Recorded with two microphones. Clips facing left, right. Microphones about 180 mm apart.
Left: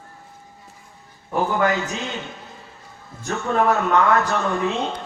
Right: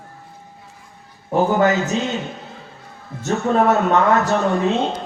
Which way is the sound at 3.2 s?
30° right (ahead or behind).